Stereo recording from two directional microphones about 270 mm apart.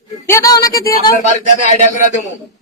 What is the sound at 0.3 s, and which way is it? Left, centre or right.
Speech, centre.